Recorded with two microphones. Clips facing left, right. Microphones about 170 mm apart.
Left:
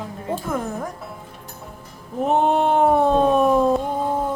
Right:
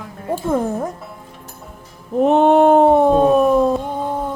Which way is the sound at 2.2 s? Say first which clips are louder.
Right 6 dB; 75° right (ahead or behind).